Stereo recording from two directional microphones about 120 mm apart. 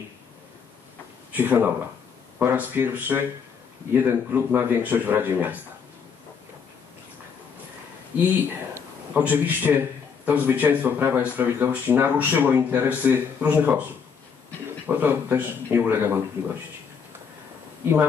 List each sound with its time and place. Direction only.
1.3 s a man's voice: 15° right (ahead or behind)
8.2 s a man's voice: 15° right (ahead or behind)
14.9 s a man's voice: 15° right (ahead or behind)